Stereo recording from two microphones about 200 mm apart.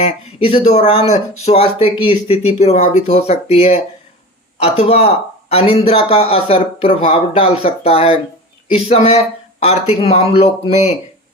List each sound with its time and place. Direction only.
0.0 s speech: 30° left (ahead or behind)
4.9 s speech: 30° left (ahead or behind)